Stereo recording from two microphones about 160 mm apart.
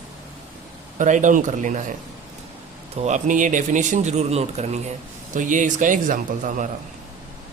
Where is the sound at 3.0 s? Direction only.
50° right (ahead or behind).